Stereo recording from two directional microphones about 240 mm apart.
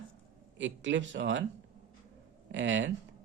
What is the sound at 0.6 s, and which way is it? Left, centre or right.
Speech, right.